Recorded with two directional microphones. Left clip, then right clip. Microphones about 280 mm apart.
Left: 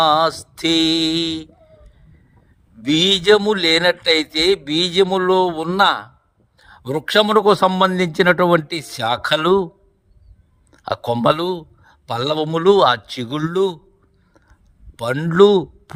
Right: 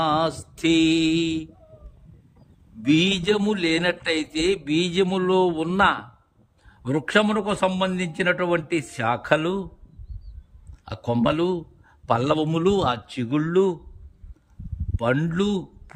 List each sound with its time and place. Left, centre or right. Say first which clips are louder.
0.0 s a man's voice: left 7 dB; centre
2.8 s a man's voice: left 6 dB; centre
10.7 s a man's voice: left 7 dB; centre
14.9 s a man's voice: left 8 dB; centre